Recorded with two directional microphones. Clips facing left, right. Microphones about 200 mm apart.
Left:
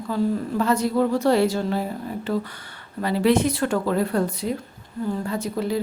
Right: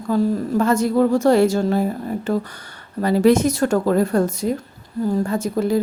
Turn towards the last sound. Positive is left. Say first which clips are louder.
# right 5 dB
turn(degrees=-45)  # may be behind; listen again after turning